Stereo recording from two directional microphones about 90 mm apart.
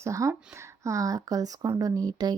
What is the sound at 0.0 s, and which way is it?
Speech, 35° right (ahead or behind).